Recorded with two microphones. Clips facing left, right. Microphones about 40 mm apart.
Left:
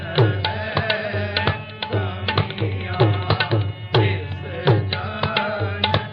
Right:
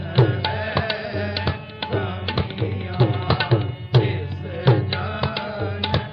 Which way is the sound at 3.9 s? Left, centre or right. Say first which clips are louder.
Left 2 dB; left.